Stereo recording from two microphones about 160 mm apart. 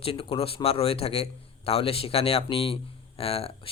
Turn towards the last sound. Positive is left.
turn(degrees=35)  # may be behind; listen again after turning